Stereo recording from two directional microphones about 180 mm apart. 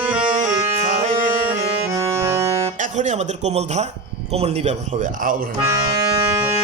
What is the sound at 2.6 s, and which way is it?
Speech, 40° right (ahead or behind).